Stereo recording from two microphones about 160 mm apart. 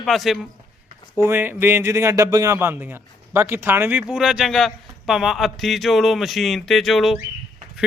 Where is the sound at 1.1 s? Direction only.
15° right (ahead or behind).